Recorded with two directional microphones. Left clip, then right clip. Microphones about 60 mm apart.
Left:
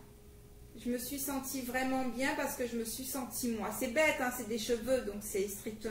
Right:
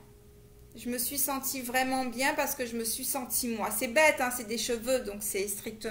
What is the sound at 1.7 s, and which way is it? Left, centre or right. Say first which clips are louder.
A woman's voice: right 6 dB; right.